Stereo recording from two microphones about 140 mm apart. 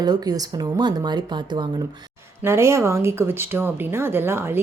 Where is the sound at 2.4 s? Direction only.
20° right (ahead or behind).